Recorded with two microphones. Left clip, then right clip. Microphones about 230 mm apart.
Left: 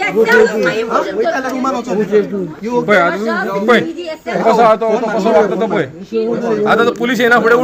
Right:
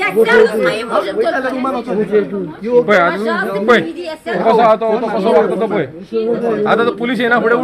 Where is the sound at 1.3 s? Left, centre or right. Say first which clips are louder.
Even; left.